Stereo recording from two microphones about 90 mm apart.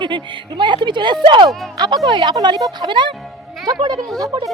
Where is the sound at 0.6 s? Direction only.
60° right (ahead or behind).